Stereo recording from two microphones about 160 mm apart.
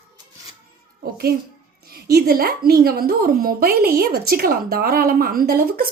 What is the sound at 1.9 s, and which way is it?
A woman's voice, 75° right (ahead or behind).